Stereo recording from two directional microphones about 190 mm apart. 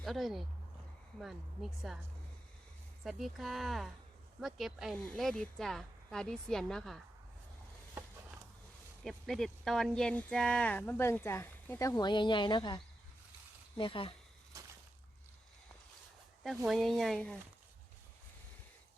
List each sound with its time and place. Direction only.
0.0 s speech: centre (ahead or behind)
9.0 s speech: centre (ahead or behind); by 14.1 s 25° left (ahead or behind)
16.6 s speech: centre (ahead or behind)